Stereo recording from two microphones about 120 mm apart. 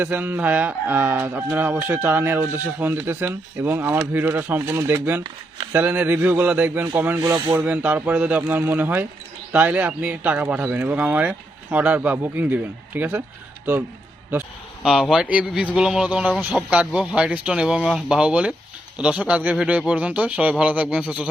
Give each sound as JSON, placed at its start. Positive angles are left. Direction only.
{"t": 0.0, "sound": "speech", "side_deg": -15}
{"t": 7.3, "sound": "speech", "side_deg": -30}
{"t": 7.5, "sound": "speech", "side_deg": -15}
{"t": 14.8, "sound": "a man's voice", "side_deg": -5}